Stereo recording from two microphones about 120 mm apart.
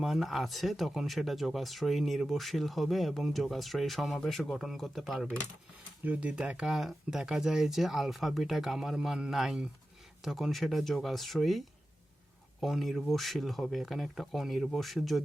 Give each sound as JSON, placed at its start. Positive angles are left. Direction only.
{"t": 0.0, "sound": "speech", "side_deg": 0}
{"t": 6.0, "sound": "speech", "side_deg": -15}